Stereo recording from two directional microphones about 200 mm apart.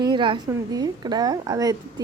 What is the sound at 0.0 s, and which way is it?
A woman's voice, 25° right (ahead or behind).